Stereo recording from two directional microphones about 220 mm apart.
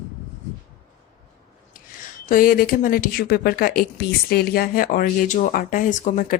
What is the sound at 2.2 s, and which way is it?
A woman's voice, 40° left (ahead or behind).